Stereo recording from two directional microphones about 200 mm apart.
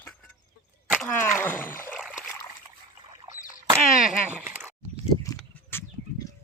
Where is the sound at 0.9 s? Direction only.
5° left (ahead or behind).